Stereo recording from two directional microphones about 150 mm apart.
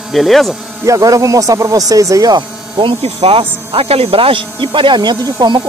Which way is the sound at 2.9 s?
40° right (ahead or behind).